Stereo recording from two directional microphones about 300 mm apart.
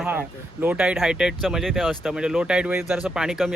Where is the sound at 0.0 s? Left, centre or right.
Centre.